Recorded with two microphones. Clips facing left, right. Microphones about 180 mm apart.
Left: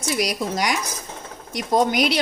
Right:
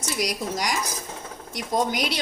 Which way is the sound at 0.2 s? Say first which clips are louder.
Left 2 dB; 65° left (ahead or behind).